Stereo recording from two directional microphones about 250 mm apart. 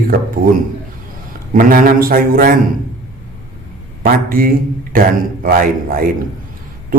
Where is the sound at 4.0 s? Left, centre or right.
Right.